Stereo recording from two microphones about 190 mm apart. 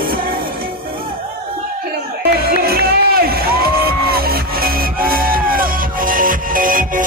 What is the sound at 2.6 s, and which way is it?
Music, 55° right (ahead or behind).